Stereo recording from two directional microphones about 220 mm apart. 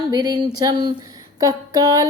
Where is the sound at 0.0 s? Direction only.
20° right (ahead or behind).